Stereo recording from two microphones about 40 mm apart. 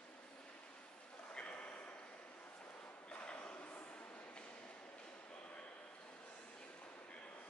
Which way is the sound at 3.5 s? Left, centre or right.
Left.